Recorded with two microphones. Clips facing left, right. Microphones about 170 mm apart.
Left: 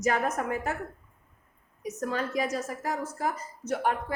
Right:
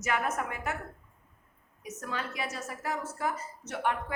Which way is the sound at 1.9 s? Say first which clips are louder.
Left 6 dB; 40° left (ahead or behind).